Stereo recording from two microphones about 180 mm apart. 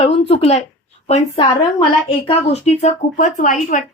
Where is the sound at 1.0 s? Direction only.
30° left (ahead or behind).